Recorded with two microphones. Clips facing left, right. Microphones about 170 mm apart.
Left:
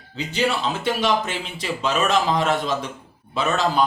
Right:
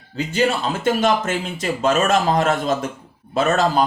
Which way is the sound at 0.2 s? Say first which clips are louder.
Right 3 dB; 45° right (ahead or behind).